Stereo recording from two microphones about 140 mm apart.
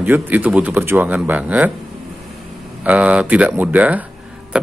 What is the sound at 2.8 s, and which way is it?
Speech, 10° right (ahead or behind).